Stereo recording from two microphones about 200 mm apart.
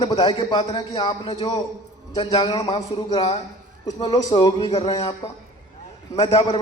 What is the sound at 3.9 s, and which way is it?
A man's voice, 20° left (ahead or behind).